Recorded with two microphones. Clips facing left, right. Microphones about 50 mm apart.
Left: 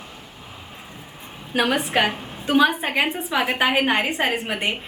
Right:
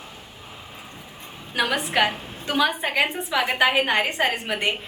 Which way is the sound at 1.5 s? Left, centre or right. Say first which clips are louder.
Left 2 dB; left.